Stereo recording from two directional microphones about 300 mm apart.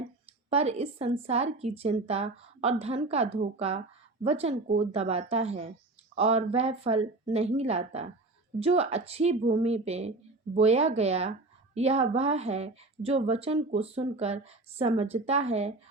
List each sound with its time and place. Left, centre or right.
0.5 s a woman's voice: centre